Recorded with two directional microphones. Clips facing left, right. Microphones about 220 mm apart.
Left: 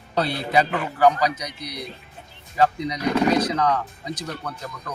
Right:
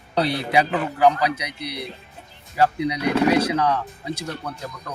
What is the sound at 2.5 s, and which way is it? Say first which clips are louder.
Speech: right 1 dB; 10° right (ahead or behind).